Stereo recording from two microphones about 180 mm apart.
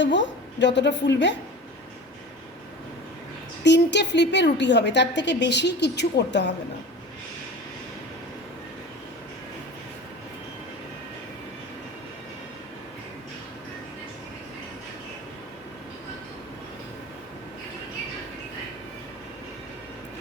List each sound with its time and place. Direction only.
0.0 s a woman's voice: 80° left
3.6 s a woman's voice: 75° left (ahead or behind)